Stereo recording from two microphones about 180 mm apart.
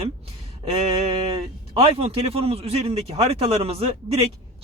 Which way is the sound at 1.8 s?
35° right (ahead or behind).